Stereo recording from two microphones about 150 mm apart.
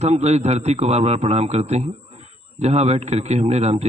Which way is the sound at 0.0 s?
45° right (ahead or behind).